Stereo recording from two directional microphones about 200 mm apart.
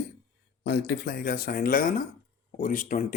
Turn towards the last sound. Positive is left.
turn(degrees=40)  # may be behind; listen again after turning